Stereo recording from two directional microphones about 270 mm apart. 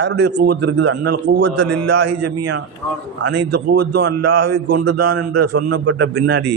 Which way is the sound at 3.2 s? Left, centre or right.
Right.